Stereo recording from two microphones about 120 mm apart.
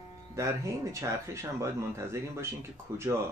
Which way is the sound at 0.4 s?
25° right (ahead or behind).